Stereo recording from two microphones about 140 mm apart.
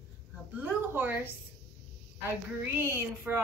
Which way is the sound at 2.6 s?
20° right (ahead or behind).